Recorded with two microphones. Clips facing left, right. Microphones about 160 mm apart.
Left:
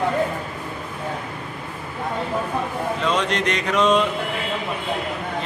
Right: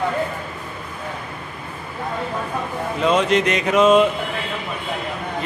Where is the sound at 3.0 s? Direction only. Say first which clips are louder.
Right 6 dB; 5° right (ahead or behind).